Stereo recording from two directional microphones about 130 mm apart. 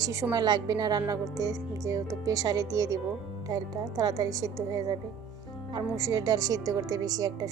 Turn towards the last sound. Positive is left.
turn(degrees=-30)  # may be behind; listen again after turning